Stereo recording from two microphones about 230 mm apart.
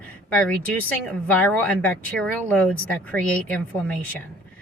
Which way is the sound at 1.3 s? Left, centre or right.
Centre.